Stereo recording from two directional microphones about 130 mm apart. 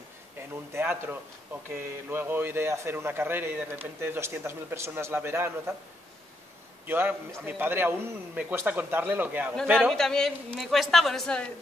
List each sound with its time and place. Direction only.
0.4 s speech: 15° right (ahead or behind)
6.9 s speech: 15° right (ahead or behind)
9.8 s a woman's voice: 5° left (ahead or behind)